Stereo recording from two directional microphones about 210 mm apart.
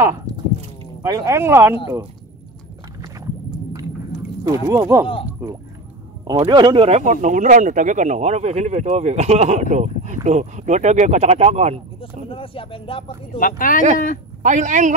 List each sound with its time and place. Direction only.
1.0 s speech: 15° right (ahead or behind)
4.6 s a man's voice: 15° right (ahead or behind)
12.0 s speech: 25° left (ahead or behind)
13.4 s speech: 40° left (ahead or behind)
14.4 s a man's voice: 35° right (ahead or behind)